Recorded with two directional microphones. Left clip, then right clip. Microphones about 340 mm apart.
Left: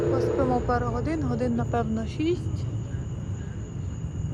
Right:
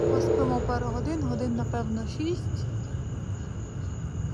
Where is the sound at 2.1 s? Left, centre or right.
Centre.